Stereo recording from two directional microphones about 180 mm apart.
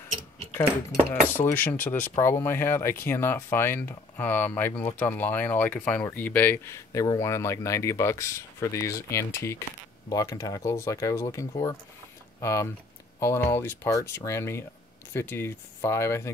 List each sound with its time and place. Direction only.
0.5 s speech: 15° left (ahead or behind)